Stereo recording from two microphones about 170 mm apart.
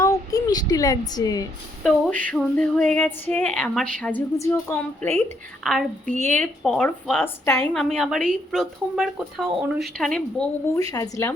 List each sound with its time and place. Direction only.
0.0 s a woman's voice: 20° left (ahead or behind)
1.8 s a woman's voice: 5° left (ahead or behind)
4.4 s a woman's voice: 15° left (ahead or behind)
5.6 s speech: centre (ahead or behind)
6.1 s speech: 45° right (ahead or behind)
6.4 s speech: 5° left (ahead or behind)
10.9 s a woman's voice: 15° left (ahead or behind)